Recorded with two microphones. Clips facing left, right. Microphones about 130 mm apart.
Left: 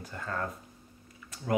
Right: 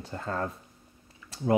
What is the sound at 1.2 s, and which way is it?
Typing, 30° right (ahead or behind).